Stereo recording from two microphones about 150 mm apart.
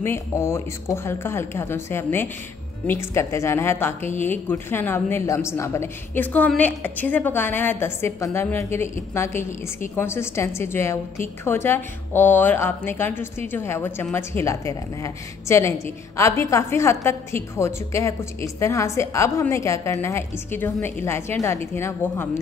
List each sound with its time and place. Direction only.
0.0 s a woman's voice: 15° left (ahead or behind)